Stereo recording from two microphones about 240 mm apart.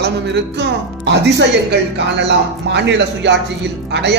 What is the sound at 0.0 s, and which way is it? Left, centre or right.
A man's voice, right.